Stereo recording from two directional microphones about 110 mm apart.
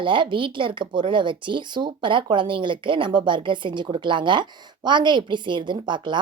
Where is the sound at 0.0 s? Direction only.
50° right (ahead or behind).